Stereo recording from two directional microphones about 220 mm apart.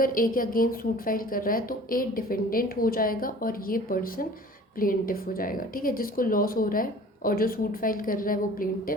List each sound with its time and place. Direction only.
0.0 s a woman's voice: 40° left (ahead or behind)